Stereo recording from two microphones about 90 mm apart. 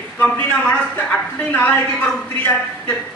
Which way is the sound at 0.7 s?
20° left (ahead or behind).